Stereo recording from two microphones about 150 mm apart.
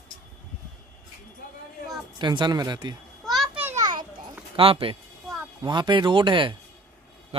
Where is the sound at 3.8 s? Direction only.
30° right (ahead or behind).